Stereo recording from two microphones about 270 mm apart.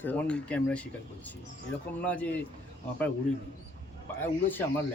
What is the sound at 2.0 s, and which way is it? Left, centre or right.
Speech, centre.